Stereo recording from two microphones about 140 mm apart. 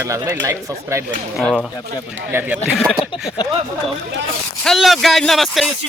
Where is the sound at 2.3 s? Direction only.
10° right (ahead or behind).